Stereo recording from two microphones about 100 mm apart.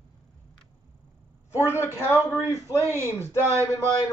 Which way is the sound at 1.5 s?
25° left (ahead or behind).